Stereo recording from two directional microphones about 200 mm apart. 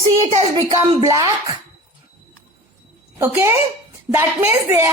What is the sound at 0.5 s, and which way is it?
A woman's voice, 15° right (ahead or behind).